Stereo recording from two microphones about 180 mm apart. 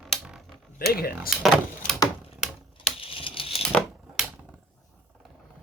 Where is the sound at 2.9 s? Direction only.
30° left (ahead or behind).